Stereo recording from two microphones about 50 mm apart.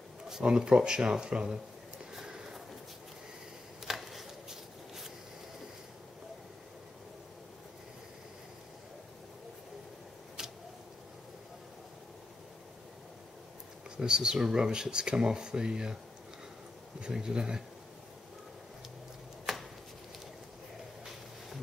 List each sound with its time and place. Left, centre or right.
0.3 s speech: centre
2.1 s sniff: centre
3.8 s a sound: centre
13.9 s speech: centre
17.0 s speech: centre
19.5 s chopping: centre